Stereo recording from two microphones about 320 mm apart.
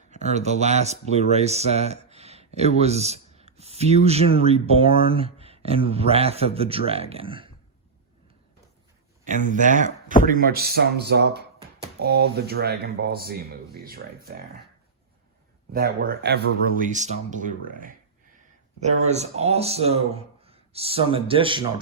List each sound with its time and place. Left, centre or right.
0.1 s a man's voice: right
9.2 s a man's voice: right
15.7 s a man's voice: right